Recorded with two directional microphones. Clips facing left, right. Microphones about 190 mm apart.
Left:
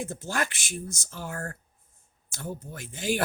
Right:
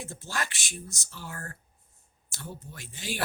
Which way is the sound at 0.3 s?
50° left (ahead or behind).